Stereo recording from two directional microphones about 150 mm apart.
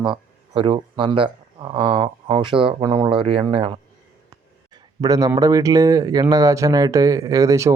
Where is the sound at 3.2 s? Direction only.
40° right (ahead or behind).